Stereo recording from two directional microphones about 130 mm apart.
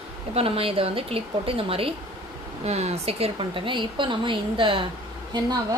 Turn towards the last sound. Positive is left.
turn(degrees=-30)  # may be behind; listen again after turning